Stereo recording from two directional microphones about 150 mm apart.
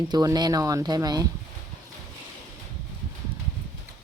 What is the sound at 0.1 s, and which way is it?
Speech, 25° right (ahead or behind).